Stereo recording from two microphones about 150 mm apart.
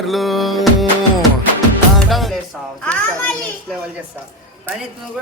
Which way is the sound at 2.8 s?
10° left (ahead or behind).